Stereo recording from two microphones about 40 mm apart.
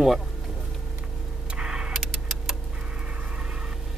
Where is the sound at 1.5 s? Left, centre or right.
Right.